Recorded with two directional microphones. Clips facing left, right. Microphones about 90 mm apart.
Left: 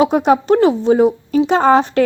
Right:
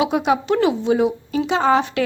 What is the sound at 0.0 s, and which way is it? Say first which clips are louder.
A woman's voice: left 5 dB; 40° left (ahead or behind).